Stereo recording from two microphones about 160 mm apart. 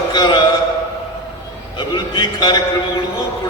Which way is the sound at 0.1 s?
25° left (ahead or behind).